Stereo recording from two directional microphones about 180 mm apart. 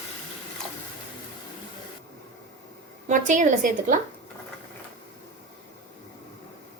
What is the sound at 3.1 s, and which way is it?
Speech, 45° right (ahead or behind).